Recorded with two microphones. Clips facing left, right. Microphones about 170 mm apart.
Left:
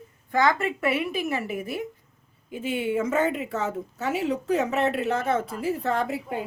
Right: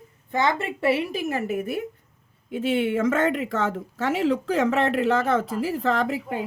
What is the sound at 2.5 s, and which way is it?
Speech, 80° right.